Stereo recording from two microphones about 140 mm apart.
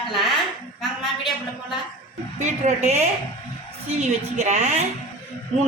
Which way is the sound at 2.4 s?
55° right (ahead or behind).